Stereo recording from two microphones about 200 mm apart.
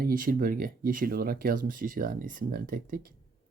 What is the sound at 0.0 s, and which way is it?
Speech, 45° right (ahead or behind).